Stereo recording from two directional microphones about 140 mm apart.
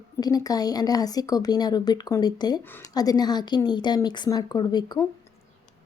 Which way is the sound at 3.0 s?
30° left (ahead or behind).